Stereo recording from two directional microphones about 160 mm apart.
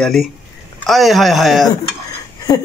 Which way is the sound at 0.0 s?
Centre (ahead or behind).